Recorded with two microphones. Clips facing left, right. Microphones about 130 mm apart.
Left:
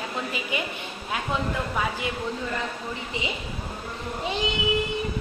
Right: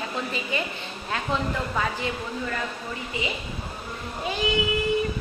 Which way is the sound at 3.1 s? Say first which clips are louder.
Right 2 dB; 20° left (ahead or behind).